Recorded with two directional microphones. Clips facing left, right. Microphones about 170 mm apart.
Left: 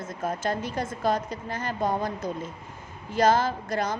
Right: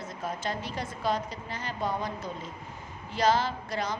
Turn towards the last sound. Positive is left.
turn(degrees=45)  # may be behind; listen again after turning